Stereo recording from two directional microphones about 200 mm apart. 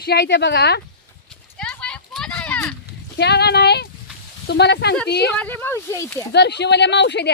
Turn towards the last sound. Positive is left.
turn(degrees=60)  # may be behind; listen again after turning